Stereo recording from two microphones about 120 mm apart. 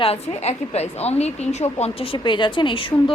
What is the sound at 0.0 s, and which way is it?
A woman's voice, 60° left (ahead or behind).